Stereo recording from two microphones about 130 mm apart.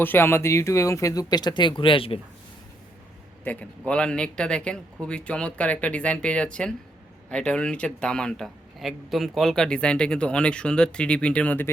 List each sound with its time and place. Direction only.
0.0 s speech: 15° left (ahead or behind); by 2.2 s 45° left (ahead or behind)
3.4 s a man's voice: 10° left (ahead or behind)